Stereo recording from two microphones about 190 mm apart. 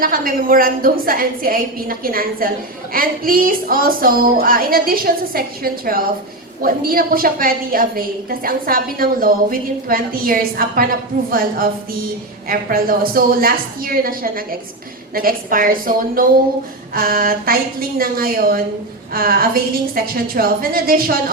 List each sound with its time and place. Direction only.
0.0 s a woman's voice: 50° right (ahead or behind)